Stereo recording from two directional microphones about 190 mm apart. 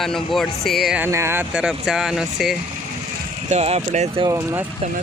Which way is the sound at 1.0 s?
15° right (ahead or behind).